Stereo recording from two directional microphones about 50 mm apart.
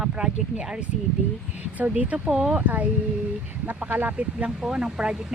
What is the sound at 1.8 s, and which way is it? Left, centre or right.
Speech, right.